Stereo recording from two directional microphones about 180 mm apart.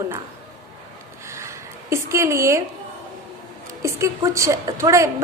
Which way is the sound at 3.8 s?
15° right (ahead or behind).